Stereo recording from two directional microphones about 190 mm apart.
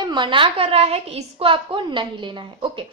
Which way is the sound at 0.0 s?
25° right (ahead or behind).